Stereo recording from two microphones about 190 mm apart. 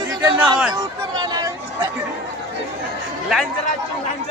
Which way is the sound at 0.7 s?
20° right (ahead or behind).